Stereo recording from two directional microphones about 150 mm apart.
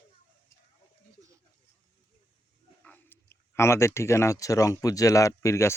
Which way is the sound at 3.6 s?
20° left (ahead or behind).